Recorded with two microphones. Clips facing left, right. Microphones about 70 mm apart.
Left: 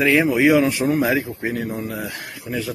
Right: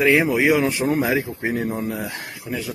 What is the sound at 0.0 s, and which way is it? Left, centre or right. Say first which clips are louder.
Speech: left 1 dB; centre.